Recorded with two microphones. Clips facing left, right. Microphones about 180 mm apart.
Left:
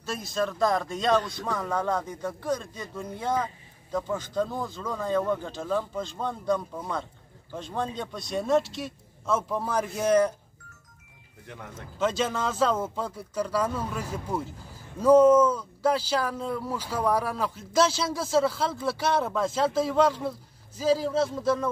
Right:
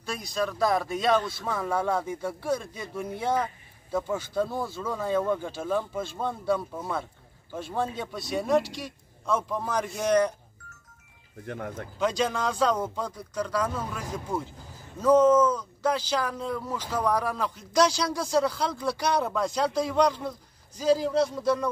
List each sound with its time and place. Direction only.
0.0 s speech: centre (ahead or behind)
11.4 s speech: 60° right (ahead or behind)
12.0 s speech: centre (ahead or behind)